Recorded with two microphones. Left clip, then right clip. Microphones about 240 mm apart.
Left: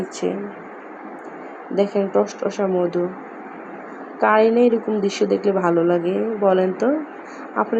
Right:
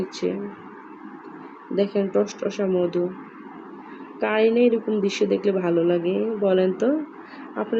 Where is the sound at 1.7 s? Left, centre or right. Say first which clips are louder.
Left 3 dB; centre.